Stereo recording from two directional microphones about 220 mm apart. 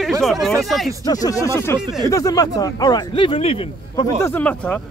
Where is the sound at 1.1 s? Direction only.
15° left (ahead or behind).